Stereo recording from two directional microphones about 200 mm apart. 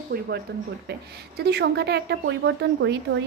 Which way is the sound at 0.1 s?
50° right (ahead or behind).